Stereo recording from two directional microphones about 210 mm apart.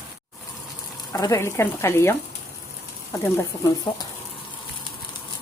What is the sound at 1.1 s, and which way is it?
Speech, 15° left (ahead or behind).